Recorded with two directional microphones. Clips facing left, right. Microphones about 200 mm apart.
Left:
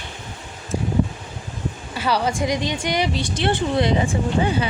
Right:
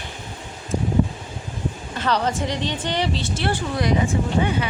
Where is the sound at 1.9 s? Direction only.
10° left (ahead or behind).